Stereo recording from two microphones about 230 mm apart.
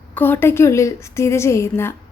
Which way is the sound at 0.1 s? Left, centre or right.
Centre.